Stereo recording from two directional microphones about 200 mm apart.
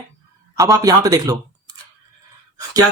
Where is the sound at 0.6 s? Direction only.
15° right (ahead or behind).